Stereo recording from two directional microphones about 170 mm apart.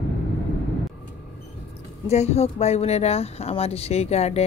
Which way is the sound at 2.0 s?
40° left (ahead or behind).